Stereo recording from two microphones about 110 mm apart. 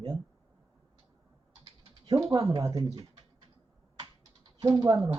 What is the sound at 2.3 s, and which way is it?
Speech, 30° right (ahead or behind).